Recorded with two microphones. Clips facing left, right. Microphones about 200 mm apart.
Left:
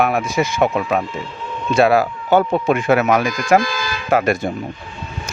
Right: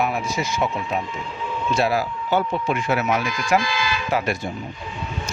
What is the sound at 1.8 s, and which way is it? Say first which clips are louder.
Speech: left 9 dB; 60° left (ahead or behind).